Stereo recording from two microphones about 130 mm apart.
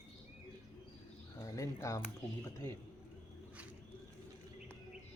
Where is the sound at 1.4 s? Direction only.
25° left (ahead or behind).